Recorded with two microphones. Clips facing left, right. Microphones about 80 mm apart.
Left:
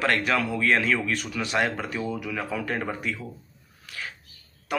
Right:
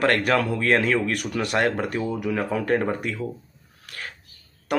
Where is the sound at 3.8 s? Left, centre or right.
Right.